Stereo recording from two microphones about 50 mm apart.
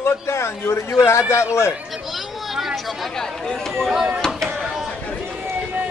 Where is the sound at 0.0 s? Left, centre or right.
Left.